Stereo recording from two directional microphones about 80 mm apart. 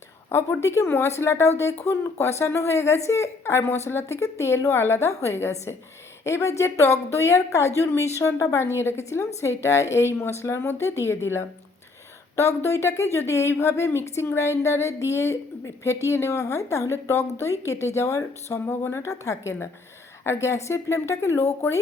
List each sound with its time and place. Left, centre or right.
0.3 s speech: left